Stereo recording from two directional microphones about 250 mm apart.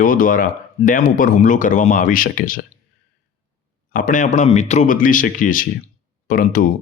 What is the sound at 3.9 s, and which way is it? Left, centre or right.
Speech, left.